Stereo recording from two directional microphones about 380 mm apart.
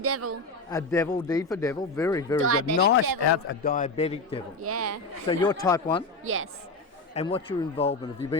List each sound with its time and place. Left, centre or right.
0.0 s speech: right
0.7 s speech: centre
2.4 s speech: right
2.7 s a man's voice: left
3.2 s a man's voice: left; by 4.4 s centre
4.6 s speech: right
5.3 s speech: centre
6.2 s speech: right
7.1 s speech: centre